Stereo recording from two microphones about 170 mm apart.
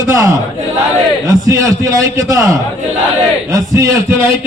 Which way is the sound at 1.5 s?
20° right (ahead or behind).